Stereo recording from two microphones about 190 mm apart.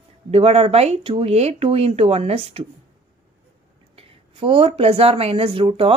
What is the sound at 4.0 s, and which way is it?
Speech, 30° right (ahead or behind).